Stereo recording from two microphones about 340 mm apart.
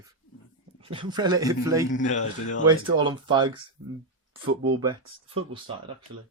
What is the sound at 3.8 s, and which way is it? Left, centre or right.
Speech, right.